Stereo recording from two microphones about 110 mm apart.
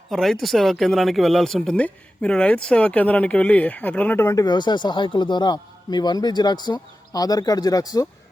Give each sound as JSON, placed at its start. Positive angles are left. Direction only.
{"t": 0.1, "sound": "speech", "side_deg": 0}
{"t": 4.4, "sound": "a man's voice", "side_deg": 40}